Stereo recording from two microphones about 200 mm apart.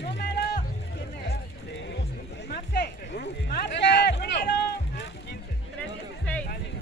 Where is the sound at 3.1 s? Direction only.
55° left (ahead or behind).